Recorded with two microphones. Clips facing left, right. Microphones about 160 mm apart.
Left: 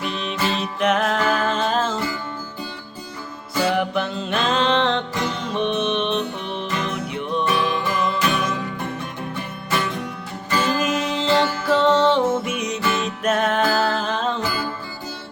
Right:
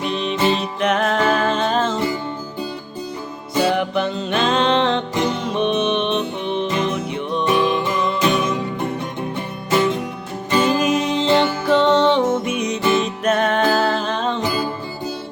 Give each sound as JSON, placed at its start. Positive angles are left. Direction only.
{"t": 0.0, "sound": "music", "side_deg": 5}
{"t": 3.7, "sound": "music", "side_deg": 0}
{"t": 7.4, "sound": "music", "side_deg": -20}
{"t": 10.8, "sound": "music", "side_deg": 0}
{"t": 11.3, "sound": "music", "side_deg": -25}
{"t": 11.7, "sound": "music", "side_deg": 5}
{"t": 14.4, "sound": "music", "side_deg": -20}